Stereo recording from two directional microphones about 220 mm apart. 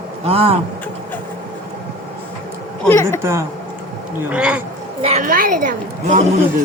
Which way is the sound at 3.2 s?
10° right (ahead or behind).